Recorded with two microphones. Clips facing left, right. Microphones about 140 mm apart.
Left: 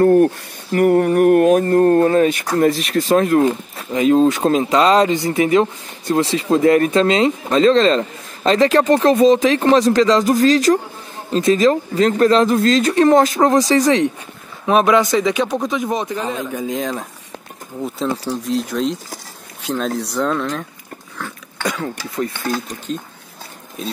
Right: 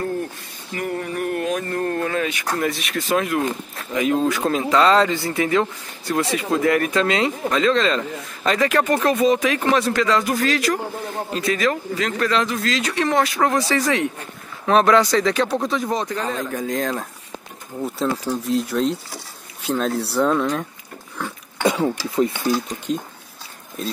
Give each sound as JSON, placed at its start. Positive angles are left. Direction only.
{"t": 0.0, "sound": "speech", "side_deg": 70}
{"t": 0.7, "sound": "a sound", "side_deg": 55}
{"t": 1.6, "sound": "speech", "side_deg": 40}
{"t": 3.9, "sound": "speech", "side_deg": 25}
{"t": 12.4, "sound": "speech", "side_deg": 45}
{"t": 14.7, "sound": "speech", "side_deg": 15}
{"t": 16.3, "sound": "speech", "side_deg": 5}
{"t": 21.6, "sound": "a sound", "side_deg": -25}
{"t": 22.9, "sound": "speech", "side_deg": -10}